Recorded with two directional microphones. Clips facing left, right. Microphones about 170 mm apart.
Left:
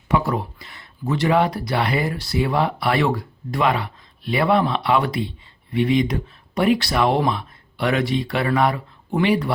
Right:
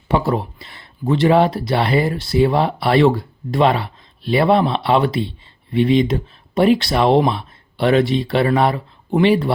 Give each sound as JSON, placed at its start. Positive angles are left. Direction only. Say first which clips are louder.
{"t": 0.1, "sound": "speech", "louder": "right 3 dB", "side_deg": -30}